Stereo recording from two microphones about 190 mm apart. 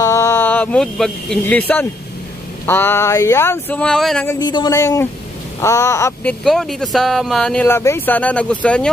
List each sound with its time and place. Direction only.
0.0 s speech: 15° left (ahead or behind)
4.4 s speech: 20° left (ahead or behind)
6.4 s speech: centre (ahead or behind)